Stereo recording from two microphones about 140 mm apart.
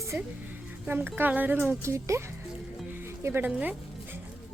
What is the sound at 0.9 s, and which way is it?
Speech, 15° right (ahead or behind).